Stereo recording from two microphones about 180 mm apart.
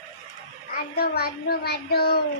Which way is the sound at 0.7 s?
60° left (ahead or behind).